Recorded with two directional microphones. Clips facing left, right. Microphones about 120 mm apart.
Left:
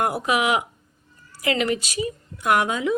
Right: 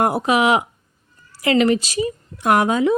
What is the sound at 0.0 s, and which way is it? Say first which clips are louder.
A woman's voice: right 5 dB; 30° right (ahead or behind).